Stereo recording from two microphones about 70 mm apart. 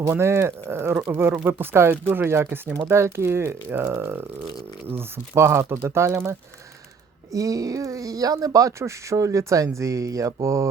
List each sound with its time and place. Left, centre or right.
0.1 s speech: right
2.7 s speech: right
7.3 s speech: right